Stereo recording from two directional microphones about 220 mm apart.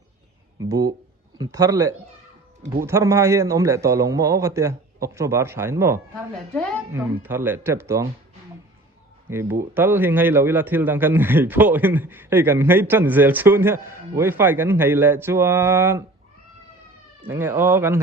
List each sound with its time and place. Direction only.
0.6 s speech: 15° right (ahead or behind)
6.3 s a woman's voice: 5° left (ahead or behind)
6.9 s speech: 10° right (ahead or behind)
9.3 s speech: 10° right (ahead or behind)
17.2 s speech: 10° right (ahead or behind)